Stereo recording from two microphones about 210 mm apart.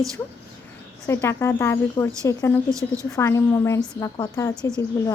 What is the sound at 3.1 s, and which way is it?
A woman's voice, 15° left (ahead or behind).